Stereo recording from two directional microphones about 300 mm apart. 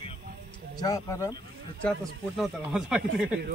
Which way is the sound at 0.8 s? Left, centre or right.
Centre.